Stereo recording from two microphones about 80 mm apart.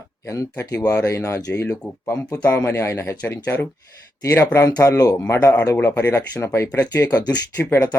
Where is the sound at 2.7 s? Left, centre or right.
Left.